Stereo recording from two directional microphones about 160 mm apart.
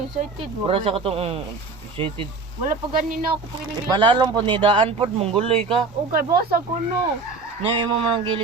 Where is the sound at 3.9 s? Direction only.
30° right (ahead or behind).